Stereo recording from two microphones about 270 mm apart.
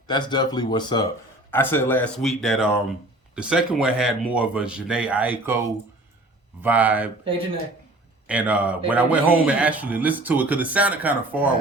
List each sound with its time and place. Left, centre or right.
0.1 s speech: centre
7.3 s speech: centre
8.3 s speech: centre